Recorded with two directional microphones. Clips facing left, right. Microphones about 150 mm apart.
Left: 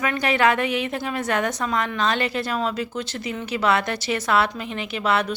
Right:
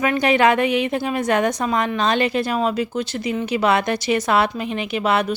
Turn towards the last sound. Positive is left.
turn(degrees=-15)  # may be behind; listen again after turning